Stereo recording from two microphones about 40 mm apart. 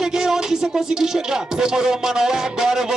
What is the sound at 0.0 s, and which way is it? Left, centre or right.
Music, centre.